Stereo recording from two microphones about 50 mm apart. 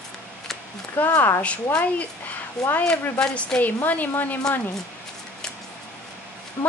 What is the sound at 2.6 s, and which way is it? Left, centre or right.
Speech, centre.